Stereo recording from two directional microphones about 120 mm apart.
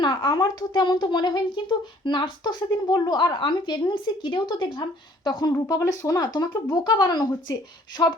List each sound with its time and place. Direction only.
0.0 s speech: 35° left (ahead or behind)